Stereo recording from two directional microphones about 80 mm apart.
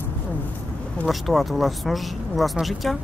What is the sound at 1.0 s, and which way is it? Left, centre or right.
Speech, centre.